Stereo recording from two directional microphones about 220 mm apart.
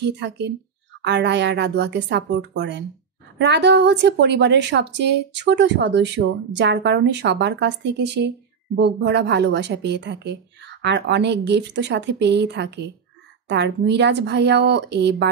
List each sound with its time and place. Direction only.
0.0 s a woman's voice: 50° right (ahead or behind)